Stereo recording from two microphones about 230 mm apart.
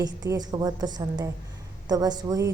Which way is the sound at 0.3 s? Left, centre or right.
Centre.